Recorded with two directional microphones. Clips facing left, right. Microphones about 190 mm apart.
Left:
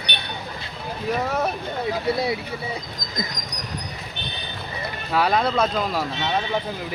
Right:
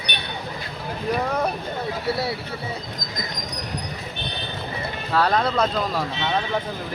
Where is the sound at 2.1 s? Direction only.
15° left (ahead or behind).